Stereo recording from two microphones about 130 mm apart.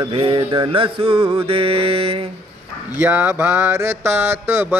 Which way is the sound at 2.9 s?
15° right (ahead or behind).